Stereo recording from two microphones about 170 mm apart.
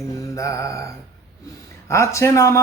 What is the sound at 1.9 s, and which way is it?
Speech, 15° left (ahead or behind).